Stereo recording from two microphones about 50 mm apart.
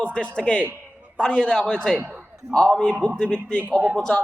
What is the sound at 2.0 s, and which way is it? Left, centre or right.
Speech, right.